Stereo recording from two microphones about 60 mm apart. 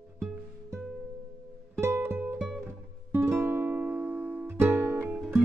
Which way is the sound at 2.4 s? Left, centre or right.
Centre.